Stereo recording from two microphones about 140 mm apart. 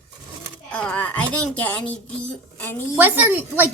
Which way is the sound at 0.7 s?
10° left (ahead or behind).